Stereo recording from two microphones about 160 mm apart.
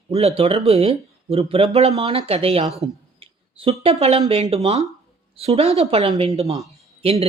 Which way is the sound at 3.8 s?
40° right (ahead or behind).